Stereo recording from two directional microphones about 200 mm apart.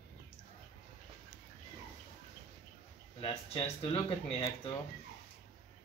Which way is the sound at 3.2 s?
30° left (ahead or behind).